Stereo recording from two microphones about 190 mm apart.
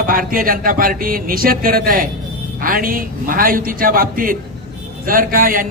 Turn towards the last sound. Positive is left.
turn(degrees=-45)  # may be behind; listen again after turning